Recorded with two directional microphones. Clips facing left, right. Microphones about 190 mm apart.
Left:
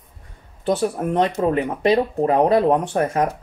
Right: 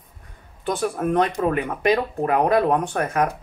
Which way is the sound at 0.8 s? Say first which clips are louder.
Right 2 dB; 25° left (ahead or behind).